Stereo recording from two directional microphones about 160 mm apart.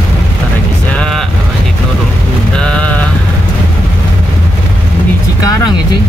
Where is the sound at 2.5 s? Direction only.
5° left (ahead or behind).